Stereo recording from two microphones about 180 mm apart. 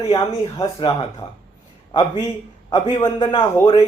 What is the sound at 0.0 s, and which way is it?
Speech, 20° left (ahead or behind).